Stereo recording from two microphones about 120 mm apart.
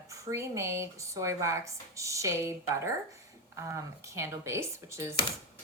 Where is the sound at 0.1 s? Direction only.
25° right (ahead or behind).